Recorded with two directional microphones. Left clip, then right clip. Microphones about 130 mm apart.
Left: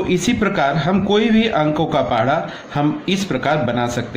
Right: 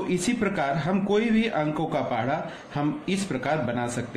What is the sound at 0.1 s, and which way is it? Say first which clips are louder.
Speech: left 7 dB; 20° left (ahead or behind).